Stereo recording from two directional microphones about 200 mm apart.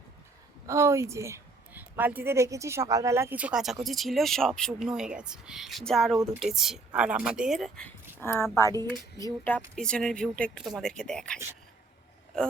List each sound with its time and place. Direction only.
0.7 s a woman's voice: 15° right (ahead or behind); by 11.3 s 5° left (ahead or behind)